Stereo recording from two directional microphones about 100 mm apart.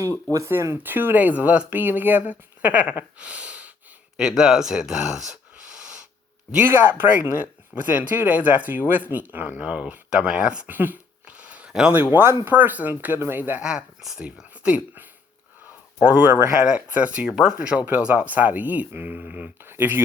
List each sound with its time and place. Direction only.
0.3 s speech: 30° right (ahead or behind)
2.6 s a sound: 15° right (ahead or behind)
4.2 s speech: 5° right (ahead or behind)
6.8 s speech: 20° right (ahead or behind)
10.8 s a sound: 20° right (ahead or behind)
12.1 s speech: 25° right (ahead or behind)
13.6 s speech: 5° right (ahead or behind)